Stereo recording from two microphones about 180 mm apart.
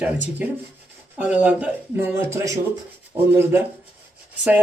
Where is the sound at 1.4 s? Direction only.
5° right (ahead or behind).